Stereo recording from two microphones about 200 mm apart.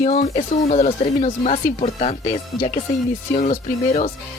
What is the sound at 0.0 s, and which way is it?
Speech, 35° left (ahead or behind).